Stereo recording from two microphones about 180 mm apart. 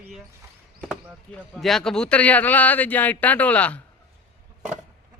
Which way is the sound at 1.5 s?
Centre (ahead or behind).